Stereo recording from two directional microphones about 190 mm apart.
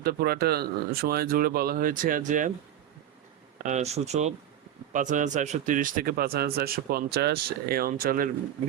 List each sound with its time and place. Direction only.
0.0 s a man's voice: 50° right (ahead or behind)
3.6 s a man's voice: 40° right (ahead or behind)